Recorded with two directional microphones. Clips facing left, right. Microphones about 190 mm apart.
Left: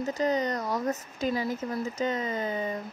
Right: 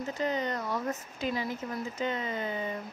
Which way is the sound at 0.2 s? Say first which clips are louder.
Left 4 dB; 40° left (ahead or behind).